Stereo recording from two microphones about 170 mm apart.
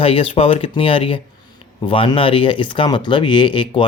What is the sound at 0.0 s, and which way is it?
Speech, 35° left (ahead or behind).